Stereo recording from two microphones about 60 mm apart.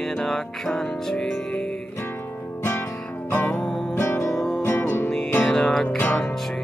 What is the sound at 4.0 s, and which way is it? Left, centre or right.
Music, left.